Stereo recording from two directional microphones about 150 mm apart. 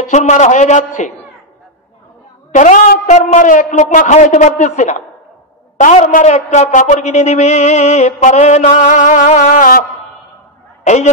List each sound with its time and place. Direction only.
0.1 s a woman's voice: 55° left (ahead or behind)
2.5 s a man's voice: 55° left (ahead or behind)